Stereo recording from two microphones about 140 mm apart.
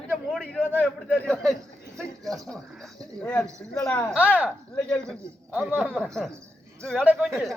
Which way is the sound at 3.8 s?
10° left (ahead or behind).